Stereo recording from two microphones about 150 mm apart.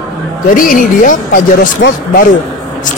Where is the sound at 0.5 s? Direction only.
65° left (ahead or behind).